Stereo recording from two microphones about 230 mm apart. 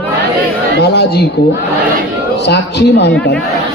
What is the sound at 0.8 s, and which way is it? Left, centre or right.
Speech, left.